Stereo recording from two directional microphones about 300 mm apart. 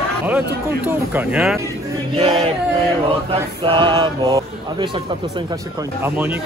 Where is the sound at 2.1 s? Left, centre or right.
Centre.